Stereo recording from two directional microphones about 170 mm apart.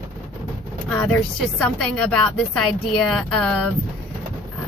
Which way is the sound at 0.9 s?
5° left (ahead or behind).